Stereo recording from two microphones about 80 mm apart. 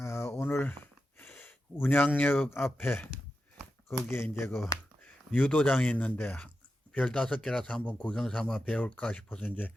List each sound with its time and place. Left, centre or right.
0.0 s a sound: left
1.2 s speech: left
4.1 s speech: left